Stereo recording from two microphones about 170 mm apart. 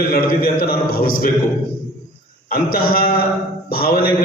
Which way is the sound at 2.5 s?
60° left (ahead or behind).